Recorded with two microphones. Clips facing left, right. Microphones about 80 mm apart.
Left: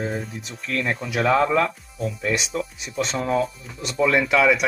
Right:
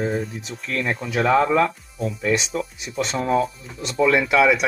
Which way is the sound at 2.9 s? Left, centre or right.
Right.